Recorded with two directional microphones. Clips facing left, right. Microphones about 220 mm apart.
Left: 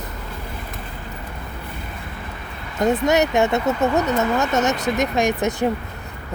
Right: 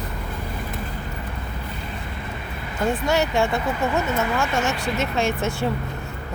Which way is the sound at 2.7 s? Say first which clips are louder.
Left 4 dB; 20° left (ahead or behind).